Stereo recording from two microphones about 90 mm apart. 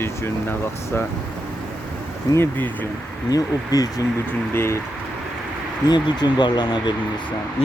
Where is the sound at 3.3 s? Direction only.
45° left (ahead or behind).